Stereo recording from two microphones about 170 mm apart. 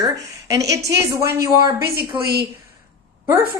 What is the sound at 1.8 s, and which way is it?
Speech, 70° right (ahead or behind).